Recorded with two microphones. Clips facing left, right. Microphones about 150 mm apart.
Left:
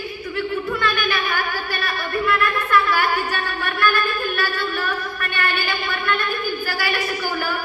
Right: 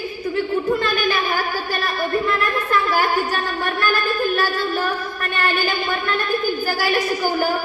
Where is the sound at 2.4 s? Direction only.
35° right (ahead or behind).